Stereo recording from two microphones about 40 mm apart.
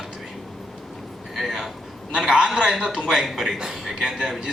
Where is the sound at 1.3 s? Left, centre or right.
Centre.